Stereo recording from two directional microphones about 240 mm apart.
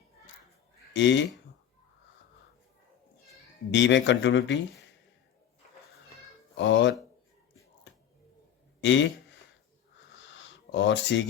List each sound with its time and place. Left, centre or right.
0.9 s speech: left
3.7 s speech: left
6.6 s speech: left
8.8 s speech: left
10.2 s a sound: left